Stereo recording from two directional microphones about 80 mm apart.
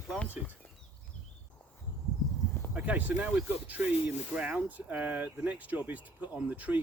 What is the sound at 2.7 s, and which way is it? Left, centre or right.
Speech, centre.